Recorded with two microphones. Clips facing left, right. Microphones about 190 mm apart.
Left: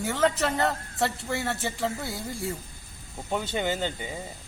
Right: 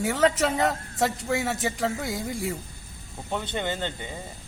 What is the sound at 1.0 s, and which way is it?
Speech, 15° right (ahead or behind).